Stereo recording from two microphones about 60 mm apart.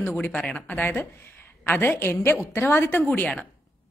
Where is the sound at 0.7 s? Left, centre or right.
Left.